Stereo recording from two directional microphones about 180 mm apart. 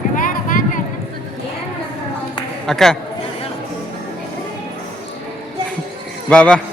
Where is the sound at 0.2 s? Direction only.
50° left (ahead or behind).